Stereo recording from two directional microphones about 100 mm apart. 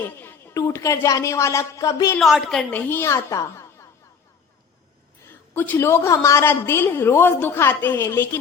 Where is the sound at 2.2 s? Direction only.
Centre (ahead or behind).